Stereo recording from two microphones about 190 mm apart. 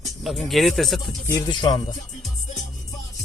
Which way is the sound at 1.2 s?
20° left (ahead or behind).